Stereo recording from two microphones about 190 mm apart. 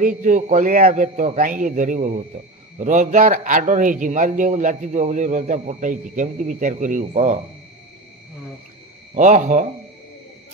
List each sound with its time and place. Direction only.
0.0 s a man's voice: 45° right (ahead or behind)
9.1 s a man's voice: 40° right (ahead or behind)